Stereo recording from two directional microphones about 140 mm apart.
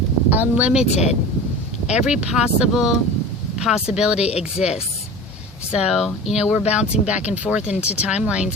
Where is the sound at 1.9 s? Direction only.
5° right (ahead or behind).